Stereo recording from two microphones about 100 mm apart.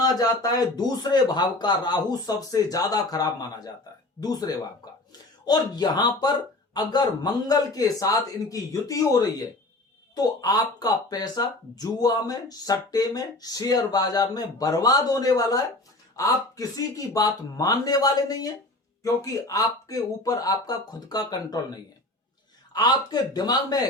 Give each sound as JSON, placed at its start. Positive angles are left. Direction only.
{"t": 0.0, "sound": "speech", "side_deg": 40}
{"t": 22.7, "sound": "speech", "side_deg": 45}